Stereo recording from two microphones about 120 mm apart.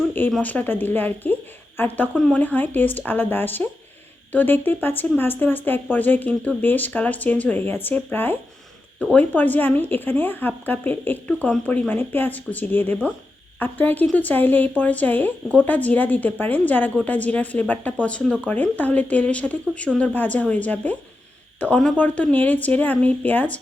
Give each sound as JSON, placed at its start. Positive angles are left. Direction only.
{"t": 0.3, "sound": "a woman's voice", "side_deg": 10}
{"t": 2.1, "sound": "speech", "side_deg": 5}
{"t": 2.4, "sound": "speech", "side_deg": 15}